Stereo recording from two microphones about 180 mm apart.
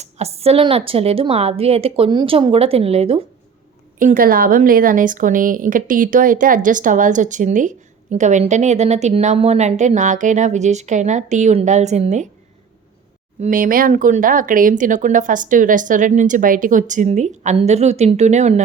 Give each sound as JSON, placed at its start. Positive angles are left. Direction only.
{"t": 0.0, "sound": "a woman's voice", "side_deg": -35}
{"t": 3.9, "sound": "a woman's voice", "side_deg": -50}
{"t": 13.4, "sound": "speech", "side_deg": -50}